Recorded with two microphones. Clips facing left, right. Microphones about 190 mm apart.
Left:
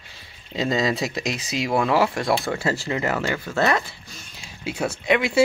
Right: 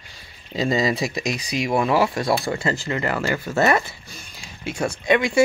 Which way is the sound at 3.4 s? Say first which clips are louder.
Right 3 dB; 10° right (ahead or behind).